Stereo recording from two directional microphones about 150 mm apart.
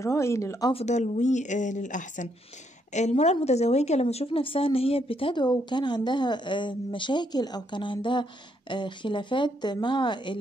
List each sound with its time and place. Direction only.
0.0 s speech: 20° left (ahead or behind)
0.7 s a woman's voice: 50° left (ahead or behind); by 10.3 s 30° left (ahead or behind)